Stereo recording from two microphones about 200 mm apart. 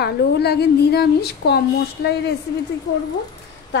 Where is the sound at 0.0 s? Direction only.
55° left (ahead or behind).